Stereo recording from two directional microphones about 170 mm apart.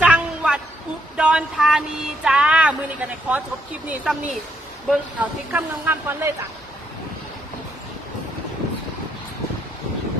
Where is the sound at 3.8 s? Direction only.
5° right (ahead or behind).